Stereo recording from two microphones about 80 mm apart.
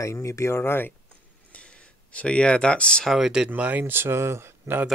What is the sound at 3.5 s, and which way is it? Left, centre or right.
Speech, right.